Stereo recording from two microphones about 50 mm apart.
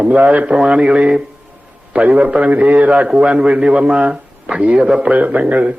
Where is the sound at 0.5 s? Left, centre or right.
Right.